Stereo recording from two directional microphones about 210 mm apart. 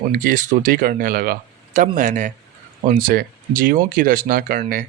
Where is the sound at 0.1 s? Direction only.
40° right (ahead or behind).